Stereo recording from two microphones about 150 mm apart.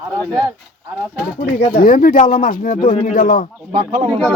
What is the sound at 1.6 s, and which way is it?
Speech, 70° left (ahead or behind).